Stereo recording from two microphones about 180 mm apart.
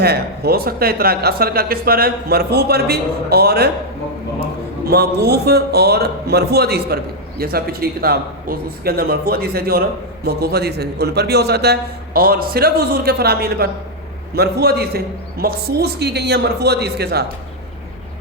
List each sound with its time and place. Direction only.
0.0 s a man's voice: 60° right (ahead or behind)
4.9 s a man's voice: 65° right (ahead or behind)